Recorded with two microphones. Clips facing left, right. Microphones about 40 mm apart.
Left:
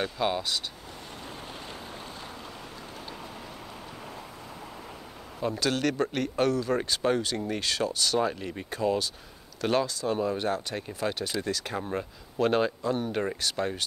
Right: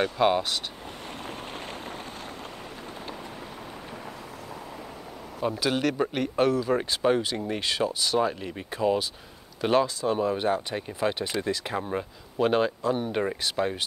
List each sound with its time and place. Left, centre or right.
0.2 s speech: right
1.2 s vehicle: right
5.4 s speech: centre